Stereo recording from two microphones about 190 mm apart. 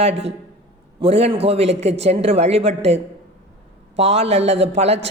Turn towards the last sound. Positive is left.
turn(degrees=-35)  # may be behind; listen again after turning